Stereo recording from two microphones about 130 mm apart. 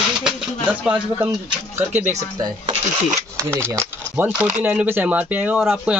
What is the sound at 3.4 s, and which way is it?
Speech, 20° right (ahead or behind).